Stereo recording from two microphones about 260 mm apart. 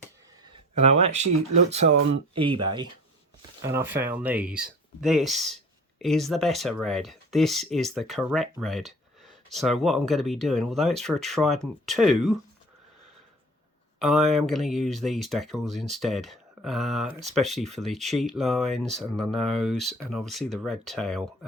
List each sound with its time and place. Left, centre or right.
0.8 s speech: right
2.3 s speech: centre
3.6 s speech: centre
14.0 s speech: centre